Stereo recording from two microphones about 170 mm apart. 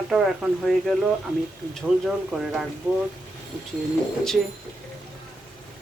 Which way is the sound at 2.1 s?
Centre (ahead or behind).